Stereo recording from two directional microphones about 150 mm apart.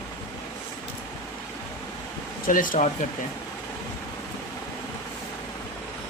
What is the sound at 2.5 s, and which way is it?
Speech, 65° left (ahead or behind).